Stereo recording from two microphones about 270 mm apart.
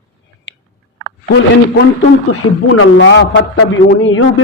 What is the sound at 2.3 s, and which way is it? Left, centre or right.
A man's voice, left.